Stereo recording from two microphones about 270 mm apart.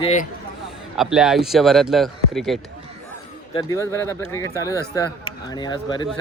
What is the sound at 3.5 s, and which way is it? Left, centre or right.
Speech, centre.